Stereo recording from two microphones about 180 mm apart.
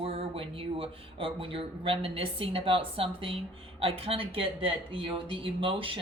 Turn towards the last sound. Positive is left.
turn(degrees=-30)  # may be behind; listen again after turning